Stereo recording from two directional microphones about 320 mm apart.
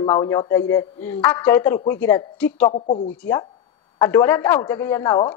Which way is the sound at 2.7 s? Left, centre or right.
Centre.